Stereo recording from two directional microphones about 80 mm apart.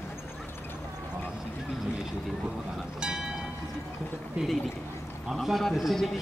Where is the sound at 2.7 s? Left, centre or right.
Centre.